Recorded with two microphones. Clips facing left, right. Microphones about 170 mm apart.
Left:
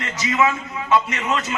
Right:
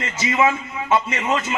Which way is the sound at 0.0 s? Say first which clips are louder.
Right 1 dB; 25° right (ahead or behind).